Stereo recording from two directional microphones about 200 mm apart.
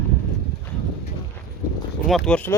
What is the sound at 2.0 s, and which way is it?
Speech, centre (ahead or behind).